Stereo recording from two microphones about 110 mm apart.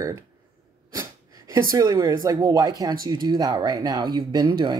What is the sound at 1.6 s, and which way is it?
Speech, 35° right (ahead or behind).